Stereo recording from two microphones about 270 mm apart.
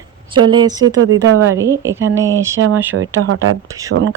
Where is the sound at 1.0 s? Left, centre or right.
Right.